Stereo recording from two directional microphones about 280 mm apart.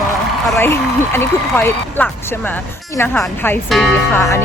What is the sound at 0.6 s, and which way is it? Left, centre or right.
Speech, centre.